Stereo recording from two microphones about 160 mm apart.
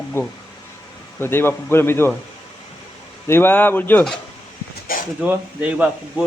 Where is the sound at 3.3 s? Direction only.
15° left (ahead or behind).